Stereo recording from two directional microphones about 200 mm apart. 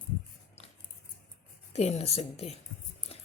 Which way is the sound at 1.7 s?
30° left (ahead or behind).